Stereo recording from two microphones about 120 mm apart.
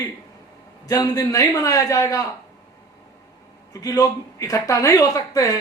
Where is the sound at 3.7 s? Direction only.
30° left (ahead or behind).